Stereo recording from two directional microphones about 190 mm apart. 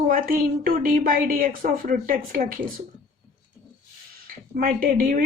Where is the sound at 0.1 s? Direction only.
50° right (ahead or behind).